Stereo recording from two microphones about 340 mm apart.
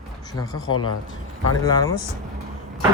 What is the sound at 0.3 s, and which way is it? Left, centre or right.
Speech, centre.